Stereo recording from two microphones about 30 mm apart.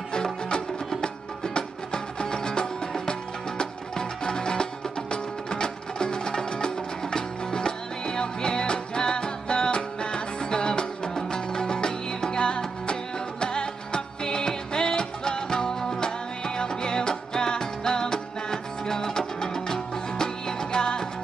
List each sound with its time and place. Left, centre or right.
0.1 s music: left